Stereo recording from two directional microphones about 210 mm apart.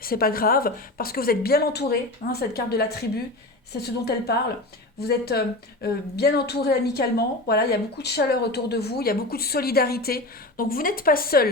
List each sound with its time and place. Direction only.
0.0 s speech: 45° left (ahead or behind)